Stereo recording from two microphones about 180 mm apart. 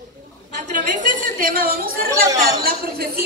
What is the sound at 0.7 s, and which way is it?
A woman's voice, 45° right (ahead or behind).